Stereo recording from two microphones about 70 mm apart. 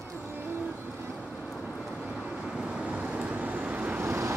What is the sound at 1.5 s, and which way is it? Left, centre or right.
Vehicle, centre.